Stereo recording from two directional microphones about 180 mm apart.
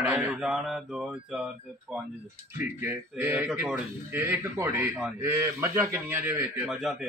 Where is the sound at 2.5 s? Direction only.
10° right (ahead or behind).